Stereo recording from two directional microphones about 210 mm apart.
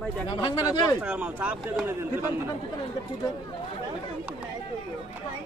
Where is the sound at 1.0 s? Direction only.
5° right (ahead or behind).